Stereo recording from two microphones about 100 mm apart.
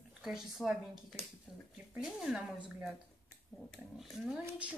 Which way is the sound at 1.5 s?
10° right (ahead or behind).